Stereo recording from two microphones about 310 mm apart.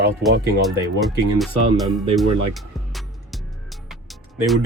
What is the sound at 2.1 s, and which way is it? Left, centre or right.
Music, centre.